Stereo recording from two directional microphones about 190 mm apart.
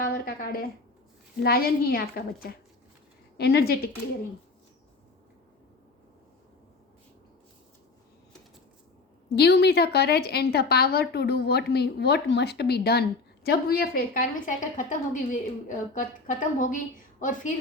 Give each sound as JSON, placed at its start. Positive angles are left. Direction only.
{"t": 0.0, "sound": "a woman's voice", "side_deg": 50}
{"t": 9.3, "sound": "a woman's voice", "side_deg": 60}